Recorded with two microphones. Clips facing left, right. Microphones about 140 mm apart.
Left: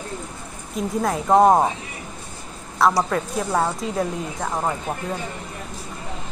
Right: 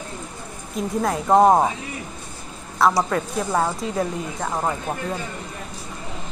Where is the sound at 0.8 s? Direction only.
Centre (ahead or behind).